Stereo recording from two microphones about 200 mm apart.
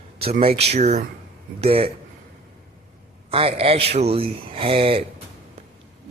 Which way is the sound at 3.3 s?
30° right (ahead or behind).